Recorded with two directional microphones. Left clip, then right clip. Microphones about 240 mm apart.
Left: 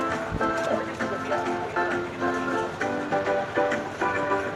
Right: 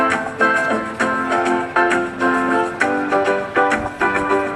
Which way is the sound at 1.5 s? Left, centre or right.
Right.